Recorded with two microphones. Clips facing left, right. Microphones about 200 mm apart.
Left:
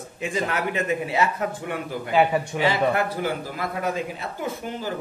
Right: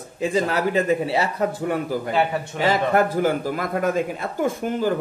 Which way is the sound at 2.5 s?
45° right (ahead or behind).